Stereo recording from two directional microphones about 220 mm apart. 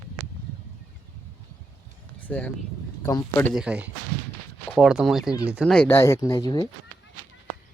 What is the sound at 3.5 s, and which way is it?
Speech, 5° right (ahead or behind).